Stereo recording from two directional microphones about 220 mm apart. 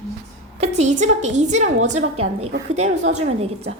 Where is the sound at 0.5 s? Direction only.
30° right (ahead or behind).